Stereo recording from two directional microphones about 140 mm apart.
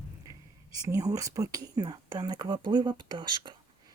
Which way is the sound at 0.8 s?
25° right (ahead or behind).